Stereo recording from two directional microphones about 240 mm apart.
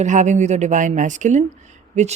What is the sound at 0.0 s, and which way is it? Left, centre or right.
A woman's voice, right.